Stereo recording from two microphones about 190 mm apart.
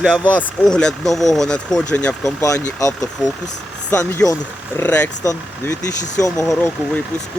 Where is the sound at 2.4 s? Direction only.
15° left (ahead or behind).